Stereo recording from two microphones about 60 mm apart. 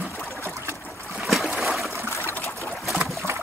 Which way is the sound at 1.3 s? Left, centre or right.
Centre.